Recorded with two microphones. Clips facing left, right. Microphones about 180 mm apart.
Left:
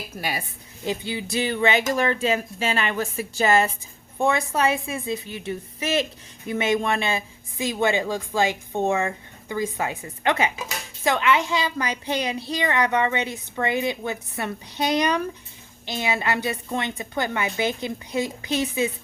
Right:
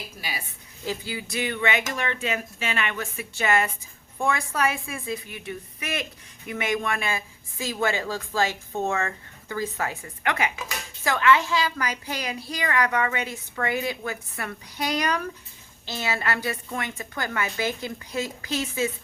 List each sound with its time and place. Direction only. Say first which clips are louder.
0.2 s a woman's voice: left 8 dB; 55° left (ahead or behind)
0.9 s a woman's voice: left 4 dB; 25° left (ahead or behind)